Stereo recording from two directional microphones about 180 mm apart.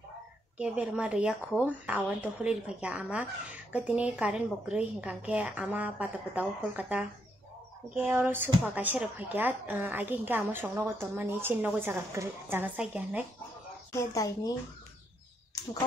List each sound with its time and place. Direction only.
0.6 s a woman's voice: 5° right (ahead or behind)
13.9 s a woman's voice: 20° left (ahead or behind)